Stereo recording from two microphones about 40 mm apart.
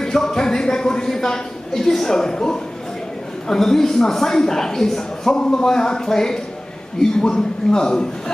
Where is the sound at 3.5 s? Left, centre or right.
Centre.